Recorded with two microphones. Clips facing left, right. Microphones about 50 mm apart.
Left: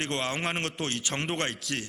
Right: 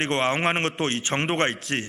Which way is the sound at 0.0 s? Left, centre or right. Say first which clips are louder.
Right 7 dB; right.